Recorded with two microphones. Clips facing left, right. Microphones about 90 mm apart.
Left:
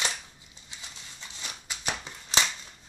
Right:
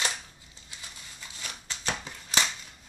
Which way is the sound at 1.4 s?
15° left (ahead or behind).